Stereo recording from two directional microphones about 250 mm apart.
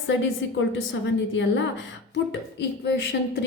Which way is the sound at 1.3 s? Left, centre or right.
Left.